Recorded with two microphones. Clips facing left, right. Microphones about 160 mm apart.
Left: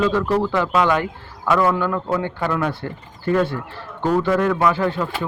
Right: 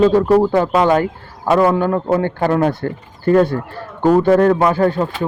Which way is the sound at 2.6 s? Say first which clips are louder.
Right 7 dB; 45° right (ahead or behind).